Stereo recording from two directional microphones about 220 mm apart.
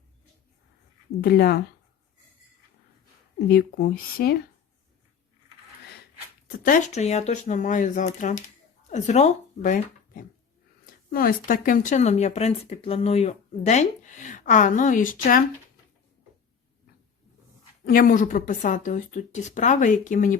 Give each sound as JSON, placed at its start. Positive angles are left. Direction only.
{"t": 1.2, "sound": "speech", "side_deg": 45}
{"t": 3.5, "sound": "speech", "side_deg": 45}
{"t": 6.7, "sound": "speech", "side_deg": 35}
{"t": 17.8, "sound": "speech", "side_deg": 40}